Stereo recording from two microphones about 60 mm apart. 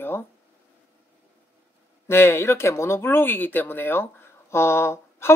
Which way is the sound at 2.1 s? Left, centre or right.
Left.